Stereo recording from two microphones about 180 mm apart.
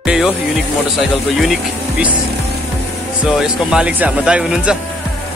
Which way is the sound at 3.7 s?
5° right (ahead or behind).